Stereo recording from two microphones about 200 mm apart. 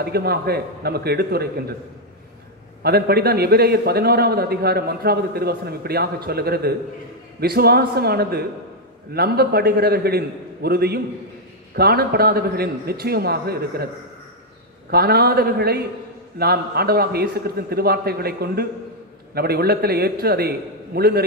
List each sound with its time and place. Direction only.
0.0 s a man's voice: 50° right (ahead or behind)
2.8 s a man's voice: 50° right (ahead or behind)
14.9 s a man's voice: 50° right (ahead or behind)